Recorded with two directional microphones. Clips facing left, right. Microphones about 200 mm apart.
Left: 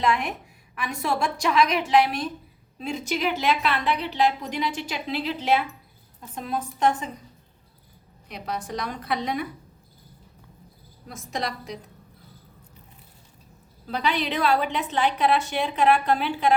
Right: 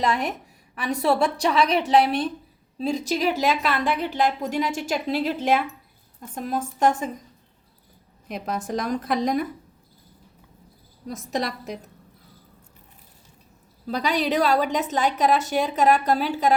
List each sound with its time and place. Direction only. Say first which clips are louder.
0.0 s a woman's voice: right 1 dB; 35° right (ahead or behind)
8.7 s a woman's voice: right 6 dB; 45° right (ahead or behind)
11.3 s a woman's voice: right 3 dB; 45° right (ahead or behind)
13.9 s a woman's voice: right 3 dB; 40° right (ahead or behind)